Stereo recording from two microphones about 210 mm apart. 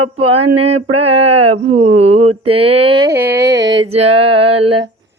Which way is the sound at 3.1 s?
50° right (ahead or behind).